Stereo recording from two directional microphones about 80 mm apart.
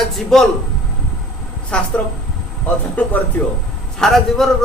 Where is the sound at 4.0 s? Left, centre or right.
Centre.